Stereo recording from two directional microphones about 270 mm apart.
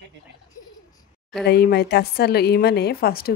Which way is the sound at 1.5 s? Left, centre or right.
Left.